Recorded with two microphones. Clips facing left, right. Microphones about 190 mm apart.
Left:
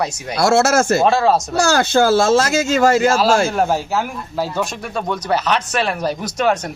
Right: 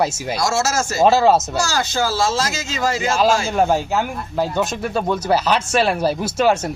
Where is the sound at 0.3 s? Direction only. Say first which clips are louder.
Left 7 dB; 60° left (ahead or behind).